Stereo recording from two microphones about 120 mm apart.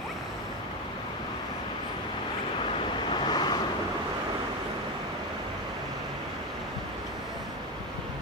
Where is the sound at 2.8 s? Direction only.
40° left (ahead or behind).